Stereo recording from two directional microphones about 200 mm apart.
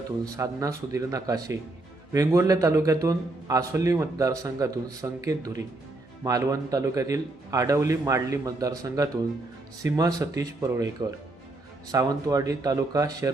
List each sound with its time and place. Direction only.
0.3 s a man's voice: 15° right (ahead or behind)